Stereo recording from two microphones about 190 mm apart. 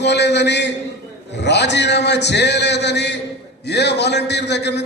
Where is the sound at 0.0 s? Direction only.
65° left (ahead or behind).